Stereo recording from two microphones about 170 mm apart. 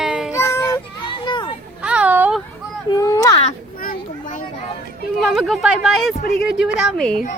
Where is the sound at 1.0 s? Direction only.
30° left (ahead or behind).